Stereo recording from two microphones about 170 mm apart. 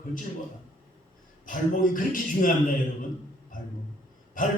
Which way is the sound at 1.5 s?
50° left (ahead or behind).